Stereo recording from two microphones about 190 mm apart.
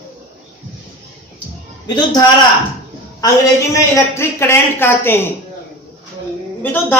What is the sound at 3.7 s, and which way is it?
A man's voice, 15° left (ahead or behind).